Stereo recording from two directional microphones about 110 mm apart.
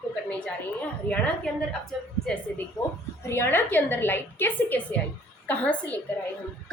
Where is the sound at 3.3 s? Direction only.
20° left (ahead or behind).